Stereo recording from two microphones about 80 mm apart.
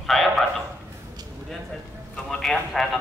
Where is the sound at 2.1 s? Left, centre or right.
Centre.